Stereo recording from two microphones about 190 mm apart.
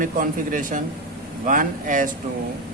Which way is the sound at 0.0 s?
45° right (ahead or behind).